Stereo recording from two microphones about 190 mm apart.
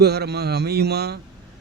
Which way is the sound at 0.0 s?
60° right (ahead or behind).